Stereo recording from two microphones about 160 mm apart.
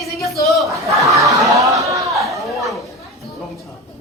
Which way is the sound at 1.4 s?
20° right (ahead or behind).